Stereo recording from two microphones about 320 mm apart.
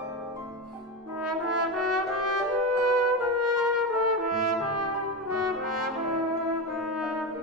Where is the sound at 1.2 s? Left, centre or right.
Right.